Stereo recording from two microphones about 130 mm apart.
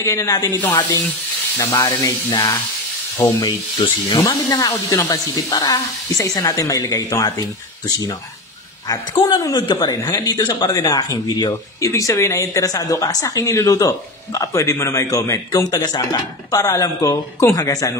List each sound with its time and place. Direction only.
0.0 s speech: 20° left (ahead or behind)
1.6 s speech: 30° left (ahead or behind)
3.3 s speech: 30° left (ahead or behind)
8.8 s speech: 25° left (ahead or behind)